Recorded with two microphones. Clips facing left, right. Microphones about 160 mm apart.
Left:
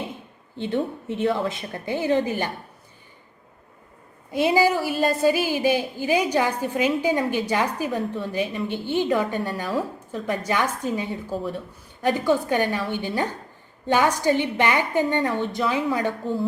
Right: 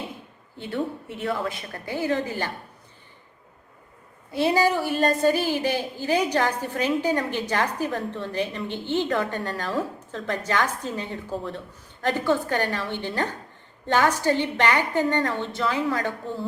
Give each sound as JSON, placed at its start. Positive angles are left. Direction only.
{"t": 0.6, "sound": "a woman's voice", "side_deg": 20}
{"t": 4.3, "sound": "a woman's voice", "side_deg": 15}